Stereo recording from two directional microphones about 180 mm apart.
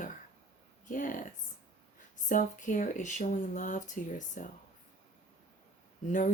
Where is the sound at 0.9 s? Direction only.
45° left (ahead or behind).